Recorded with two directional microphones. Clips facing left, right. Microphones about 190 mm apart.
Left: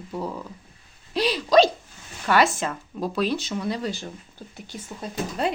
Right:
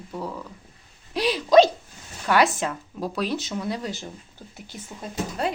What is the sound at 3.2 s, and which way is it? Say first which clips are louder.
Speech: left 2 dB; 15° right (ahead or behind).